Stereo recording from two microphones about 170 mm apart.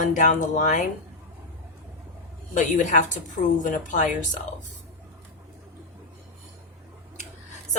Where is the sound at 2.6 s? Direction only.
45° left (ahead or behind).